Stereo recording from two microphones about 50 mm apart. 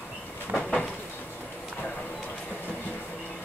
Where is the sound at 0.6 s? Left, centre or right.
Left.